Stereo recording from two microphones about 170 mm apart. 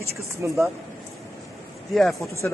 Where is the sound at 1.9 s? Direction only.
Centre (ahead or behind).